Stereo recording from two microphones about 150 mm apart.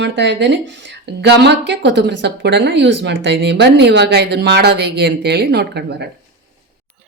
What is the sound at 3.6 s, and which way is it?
A woman's voice, 90° right.